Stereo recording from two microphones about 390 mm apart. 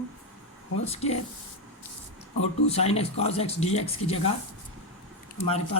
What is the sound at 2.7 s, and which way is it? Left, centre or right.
Speech, centre.